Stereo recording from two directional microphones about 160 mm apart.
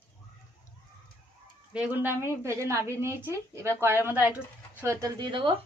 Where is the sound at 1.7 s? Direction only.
10° right (ahead or behind); by 5.5 s 30° right (ahead or behind).